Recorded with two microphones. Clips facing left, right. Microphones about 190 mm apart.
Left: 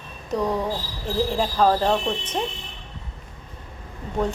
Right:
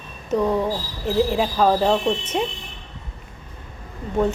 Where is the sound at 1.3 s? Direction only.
5° right (ahead or behind).